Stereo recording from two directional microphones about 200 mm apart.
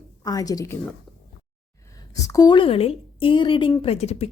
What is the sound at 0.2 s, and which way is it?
Speech, 20° left (ahead or behind).